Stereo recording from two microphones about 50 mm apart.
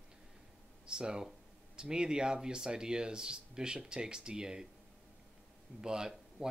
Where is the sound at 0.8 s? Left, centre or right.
Centre.